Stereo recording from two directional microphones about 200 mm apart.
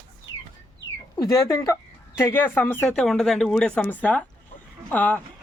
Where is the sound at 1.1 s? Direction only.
15° left (ahead or behind).